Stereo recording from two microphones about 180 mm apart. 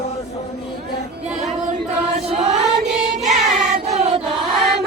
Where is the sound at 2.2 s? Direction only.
35° right (ahead or behind).